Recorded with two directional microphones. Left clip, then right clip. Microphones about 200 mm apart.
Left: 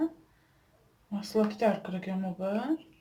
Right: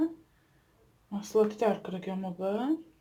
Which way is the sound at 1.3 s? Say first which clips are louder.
Right 1 dB; 30° right (ahead or behind).